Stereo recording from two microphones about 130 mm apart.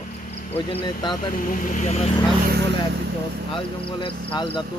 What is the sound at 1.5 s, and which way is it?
Speech, 80° left.